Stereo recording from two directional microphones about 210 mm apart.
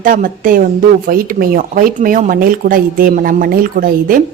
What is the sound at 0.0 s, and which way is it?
A woman's voice, 40° right (ahead or behind).